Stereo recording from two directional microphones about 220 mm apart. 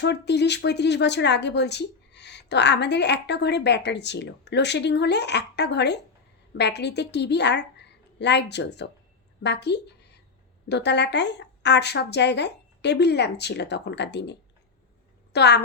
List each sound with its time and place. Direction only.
0.0 s a woman's voice: 50° left (ahead or behind)